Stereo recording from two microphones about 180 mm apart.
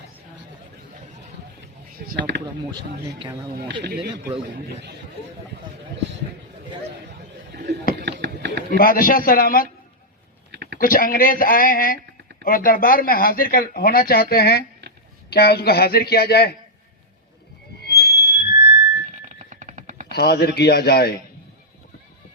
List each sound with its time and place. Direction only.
2.1 s speech: 75° right (ahead or behind)
3.8 s speech: 65° right (ahead or behind)
8.0 s chopping: 65° right (ahead or behind)
8.8 s speech: 50° left (ahead or behind)
10.5 s a sound: 70° right (ahead or behind)
10.8 s speech: 50° left (ahead or behind)
17.7 s music: 65° left (ahead or behind)
19.1 s music: 45° right (ahead or behind)
20.1 s speech: 60° left (ahead or behind)